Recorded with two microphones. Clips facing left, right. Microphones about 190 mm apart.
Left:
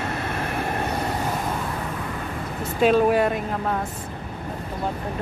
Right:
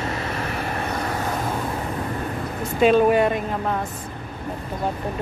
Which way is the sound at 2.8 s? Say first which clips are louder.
Right 2 dB; centre (ahead or behind).